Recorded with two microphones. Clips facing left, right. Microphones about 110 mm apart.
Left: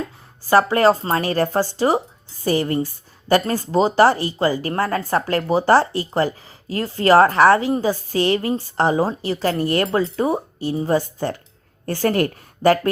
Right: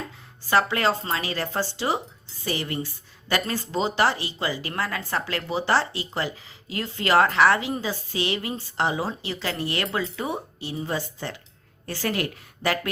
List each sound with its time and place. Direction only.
0.4 s a woman's voice: 40° left (ahead or behind)